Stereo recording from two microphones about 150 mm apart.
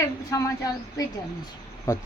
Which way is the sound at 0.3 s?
20° left (ahead or behind).